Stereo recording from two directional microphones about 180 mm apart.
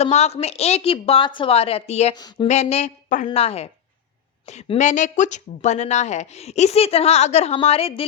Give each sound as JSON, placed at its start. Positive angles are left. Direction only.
{"t": 0.0, "sound": "speech", "side_deg": 35}
{"t": 2.1, "sound": "speech", "side_deg": 20}
{"t": 2.5, "sound": "speech", "side_deg": 35}